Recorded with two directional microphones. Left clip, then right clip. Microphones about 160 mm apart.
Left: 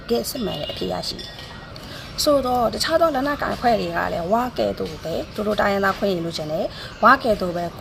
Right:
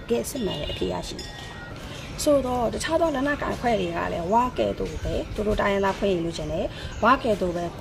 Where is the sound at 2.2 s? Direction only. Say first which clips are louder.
Left 3 dB; 15° right (ahead or behind).